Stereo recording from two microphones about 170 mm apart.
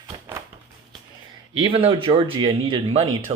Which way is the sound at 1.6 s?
30° right (ahead or behind).